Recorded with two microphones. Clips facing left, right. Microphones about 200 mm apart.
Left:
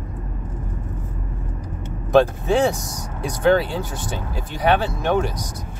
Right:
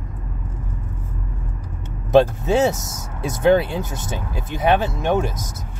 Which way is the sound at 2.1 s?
20° right (ahead or behind).